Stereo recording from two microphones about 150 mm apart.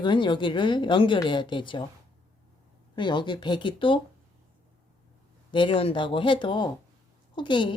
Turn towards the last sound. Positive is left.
turn(degrees=35)  # may be behind; listen again after turning